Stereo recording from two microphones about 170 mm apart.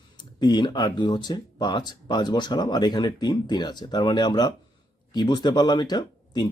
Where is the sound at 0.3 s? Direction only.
25° left (ahead or behind).